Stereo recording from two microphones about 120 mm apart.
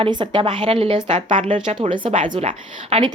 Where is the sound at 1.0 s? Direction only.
75° right (ahead or behind).